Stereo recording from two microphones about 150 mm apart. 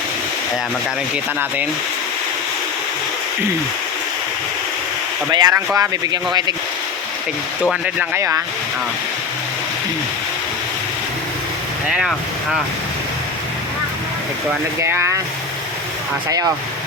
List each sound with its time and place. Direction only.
5.3 s speech: 25° right (ahead or behind)
7.9 s speech: 15° right (ahead or behind)
11.9 s speech: 5° right (ahead or behind)
14.8 s speech: 15° right (ahead or behind)